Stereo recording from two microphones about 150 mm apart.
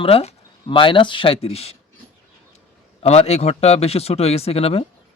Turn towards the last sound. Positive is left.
turn(degrees=40)  # may be behind; listen again after turning